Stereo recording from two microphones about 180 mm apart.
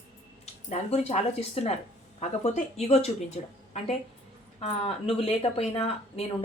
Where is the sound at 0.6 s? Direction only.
35° left (ahead or behind).